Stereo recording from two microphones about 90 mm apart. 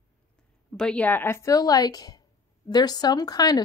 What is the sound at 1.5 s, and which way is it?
A woman's voice, 45° left (ahead or behind).